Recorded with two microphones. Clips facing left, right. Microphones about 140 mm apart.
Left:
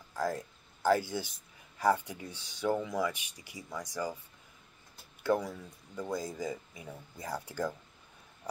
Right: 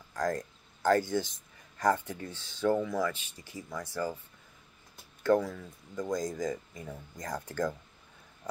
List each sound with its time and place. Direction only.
0.1 s speech: 10° left (ahead or behind)
5.2 s speech: 10° left (ahead or behind)